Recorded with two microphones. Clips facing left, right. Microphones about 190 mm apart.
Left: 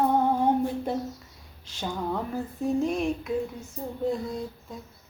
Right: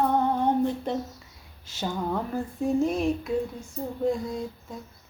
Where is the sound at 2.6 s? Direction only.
Centre (ahead or behind).